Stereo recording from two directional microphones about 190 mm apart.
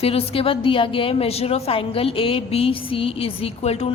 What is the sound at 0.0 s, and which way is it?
A woman's voice, 30° left (ahead or behind).